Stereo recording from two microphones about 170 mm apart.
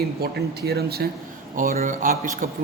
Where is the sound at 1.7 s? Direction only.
50° right (ahead or behind).